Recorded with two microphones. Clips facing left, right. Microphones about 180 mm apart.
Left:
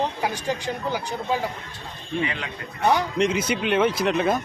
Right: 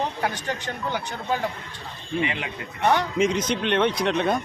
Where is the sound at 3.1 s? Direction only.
Centre (ahead or behind).